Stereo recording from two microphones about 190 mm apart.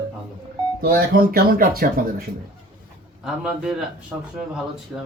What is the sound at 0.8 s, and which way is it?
Speech, 50° right (ahead or behind).